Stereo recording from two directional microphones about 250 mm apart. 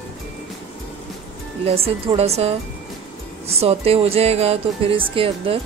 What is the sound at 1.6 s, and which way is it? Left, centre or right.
Speech, right.